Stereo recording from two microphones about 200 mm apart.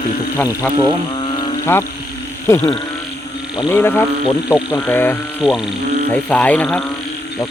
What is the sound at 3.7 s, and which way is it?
Speech, 10° left (ahead or behind).